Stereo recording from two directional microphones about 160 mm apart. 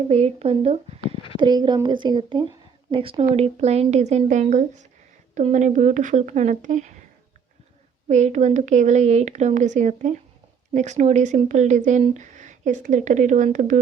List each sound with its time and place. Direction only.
0.1 s speech: 40° right (ahead or behind)
1.4 s speech: 25° right (ahead or behind); by 7.0 s 50° right (ahead or behind)
8.0 s speech: 45° right (ahead or behind)